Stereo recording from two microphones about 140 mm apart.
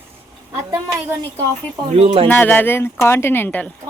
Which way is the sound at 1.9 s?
45° right (ahead or behind).